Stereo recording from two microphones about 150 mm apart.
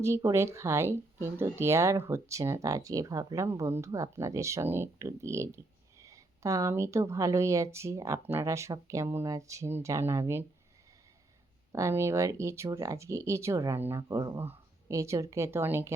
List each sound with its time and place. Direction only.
0.0 s speech: 20° right (ahead or behind)
11.7 s speech: 20° right (ahead or behind)